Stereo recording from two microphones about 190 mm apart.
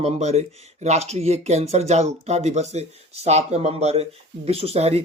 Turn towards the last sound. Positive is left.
turn(degrees=-35)  # may be behind; listen again after turning